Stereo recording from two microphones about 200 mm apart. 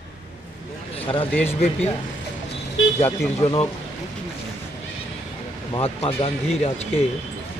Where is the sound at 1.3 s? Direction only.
5° left (ahead or behind).